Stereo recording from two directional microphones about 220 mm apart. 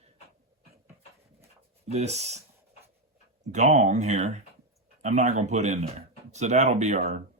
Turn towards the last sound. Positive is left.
turn(degrees=-30)  # may be behind; listen again after turning